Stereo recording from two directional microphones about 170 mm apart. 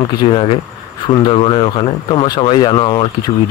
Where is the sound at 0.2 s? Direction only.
30° left (ahead or behind).